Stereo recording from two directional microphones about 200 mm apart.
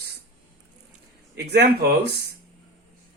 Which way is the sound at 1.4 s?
55° right (ahead or behind).